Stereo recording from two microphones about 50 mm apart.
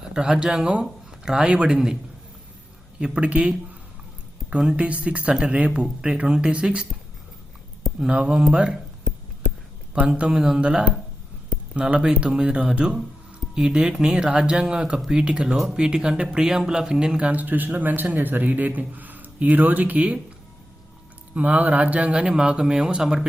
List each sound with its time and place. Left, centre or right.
0.0 s speech: centre
3.0 s speech: right
4.8 s speech: right
7.9 s speech: right
9.1 s a sound: centre
10.1 s speech: centre
17.4 s a man's voice: right
21.3 s speech: right; by 23.2 s centre